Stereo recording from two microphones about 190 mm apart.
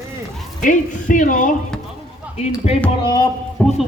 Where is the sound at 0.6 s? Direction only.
45° left (ahead or behind).